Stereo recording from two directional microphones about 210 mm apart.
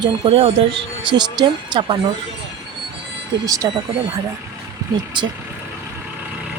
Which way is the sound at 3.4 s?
15° right (ahead or behind).